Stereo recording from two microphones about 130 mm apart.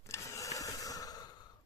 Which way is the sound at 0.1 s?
25° left (ahead or behind).